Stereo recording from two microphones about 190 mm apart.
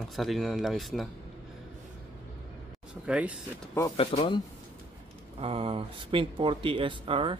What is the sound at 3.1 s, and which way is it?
Speech, 5° right (ahead or behind).